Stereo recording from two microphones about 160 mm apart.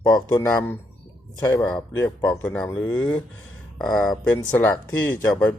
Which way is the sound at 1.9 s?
10° left (ahead or behind).